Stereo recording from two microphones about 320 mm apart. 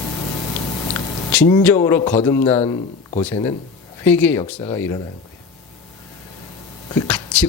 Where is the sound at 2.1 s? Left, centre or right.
Centre.